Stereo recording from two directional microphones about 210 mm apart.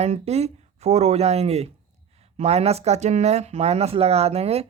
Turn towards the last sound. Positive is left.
turn(degrees=-30)  # may be behind; listen again after turning